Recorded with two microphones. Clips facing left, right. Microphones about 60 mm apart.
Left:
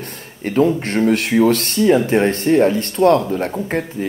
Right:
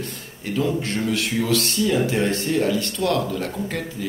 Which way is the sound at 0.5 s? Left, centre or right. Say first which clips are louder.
Left 7 dB; left.